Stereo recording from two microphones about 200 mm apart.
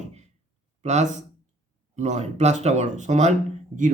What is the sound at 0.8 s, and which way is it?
Speech, 35° right (ahead or behind).